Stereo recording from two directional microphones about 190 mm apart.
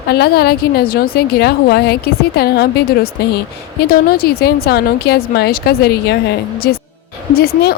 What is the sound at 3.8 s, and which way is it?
A woman's voice, 55° left (ahead or behind).